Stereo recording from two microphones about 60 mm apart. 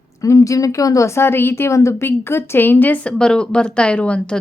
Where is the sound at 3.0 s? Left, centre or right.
Centre.